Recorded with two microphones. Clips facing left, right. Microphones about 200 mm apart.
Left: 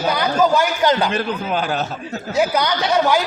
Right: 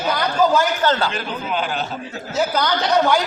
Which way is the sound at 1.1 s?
45° left (ahead or behind).